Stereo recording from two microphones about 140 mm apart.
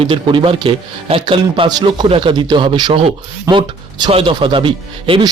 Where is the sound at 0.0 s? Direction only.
35° right (ahead or behind).